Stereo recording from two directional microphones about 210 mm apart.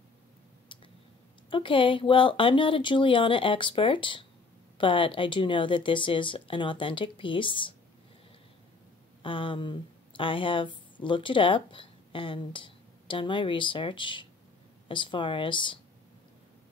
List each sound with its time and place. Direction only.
1.5 s speech: 25° left (ahead or behind)
9.2 s a woman's voice: 25° left (ahead or behind)